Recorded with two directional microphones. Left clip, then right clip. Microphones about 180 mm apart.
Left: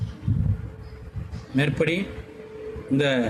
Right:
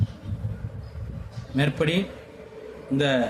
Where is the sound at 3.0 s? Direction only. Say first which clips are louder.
Even; 15° left (ahead or behind).